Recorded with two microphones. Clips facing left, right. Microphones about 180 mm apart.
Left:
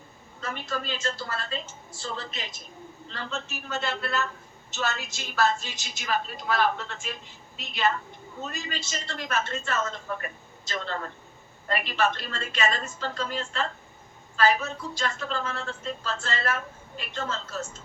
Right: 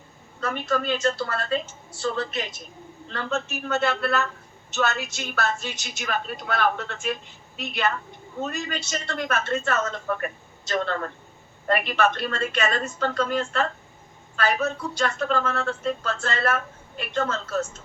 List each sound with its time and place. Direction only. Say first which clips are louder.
0.4 s a woman's voice: right 7 dB; 60° right (ahead or behind)
11.7 s a woman's voice: right 4 dB; 60° right (ahead or behind)